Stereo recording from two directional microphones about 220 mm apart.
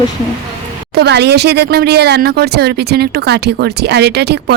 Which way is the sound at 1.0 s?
50° right (ahead or behind).